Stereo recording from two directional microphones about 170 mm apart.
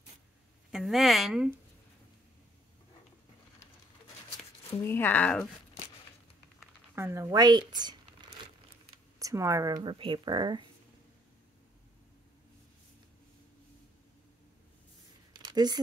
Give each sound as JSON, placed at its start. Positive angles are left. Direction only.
{"t": 0.7, "sound": "a woman's voice", "side_deg": 0}
{"t": 4.8, "sound": "speech", "side_deg": 10}
{"t": 7.0, "sound": "speech", "side_deg": -15}
{"t": 9.2, "sound": "speech", "side_deg": -20}
{"t": 15.3, "sound": "a sound", "side_deg": -25}